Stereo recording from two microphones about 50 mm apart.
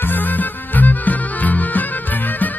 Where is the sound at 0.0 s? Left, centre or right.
Left.